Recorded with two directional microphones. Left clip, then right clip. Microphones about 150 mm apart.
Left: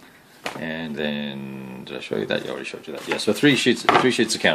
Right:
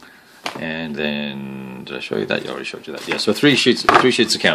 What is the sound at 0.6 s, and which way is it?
Speech, 20° right (ahead or behind).